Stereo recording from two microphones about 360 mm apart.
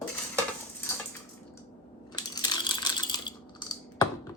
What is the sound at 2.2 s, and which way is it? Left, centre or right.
Coin, centre.